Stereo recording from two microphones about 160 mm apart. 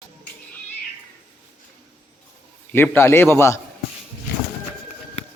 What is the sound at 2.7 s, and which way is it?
Speech, 15° left (ahead or behind).